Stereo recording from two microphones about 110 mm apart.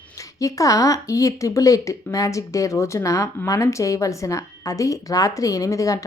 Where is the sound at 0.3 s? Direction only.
30° left (ahead or behind).